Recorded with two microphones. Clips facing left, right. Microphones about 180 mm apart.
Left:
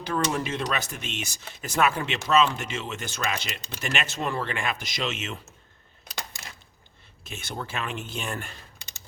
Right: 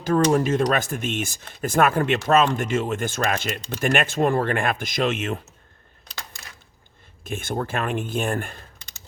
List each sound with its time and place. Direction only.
0.0 s speech: 45° right (ahead or behind)
7.3 s speech: 50° right (ahead or behind)